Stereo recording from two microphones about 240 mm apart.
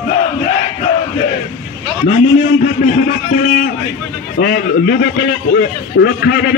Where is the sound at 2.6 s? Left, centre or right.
Left.